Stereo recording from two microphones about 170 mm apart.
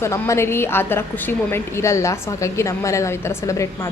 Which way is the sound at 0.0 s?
15° left (ahead or behind).